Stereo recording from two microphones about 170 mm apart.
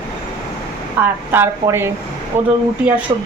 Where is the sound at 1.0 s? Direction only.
10° right (ahead or behind).